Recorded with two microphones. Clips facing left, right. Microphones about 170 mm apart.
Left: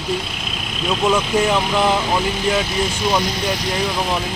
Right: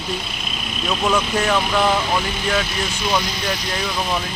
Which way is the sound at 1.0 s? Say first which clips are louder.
Left 3 dB; 20° left (ahead or behind).